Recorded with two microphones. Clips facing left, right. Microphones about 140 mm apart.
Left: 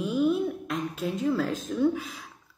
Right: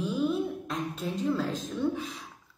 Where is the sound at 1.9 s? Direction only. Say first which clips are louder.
Left 1 dB; centre (ahead or behind).